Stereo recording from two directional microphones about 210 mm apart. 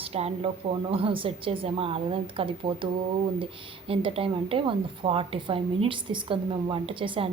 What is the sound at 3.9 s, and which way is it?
Speech, 25° right (ahead or behind).